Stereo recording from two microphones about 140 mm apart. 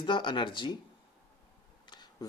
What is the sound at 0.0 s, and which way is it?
Speech, 35° left (ahead or behind).